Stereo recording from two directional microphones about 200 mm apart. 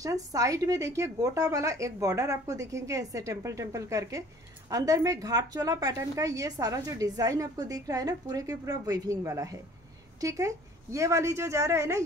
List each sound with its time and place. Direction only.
0.0 s speech: 15° right (ahead or behind)